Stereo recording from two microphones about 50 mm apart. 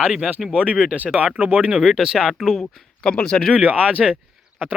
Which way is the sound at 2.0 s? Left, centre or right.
Centre.